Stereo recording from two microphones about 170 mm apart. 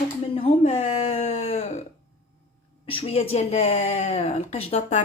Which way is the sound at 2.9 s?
35° left (ahead or behind).